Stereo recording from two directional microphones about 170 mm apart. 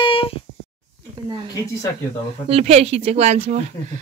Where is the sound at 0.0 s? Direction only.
30° left (ahead or behind).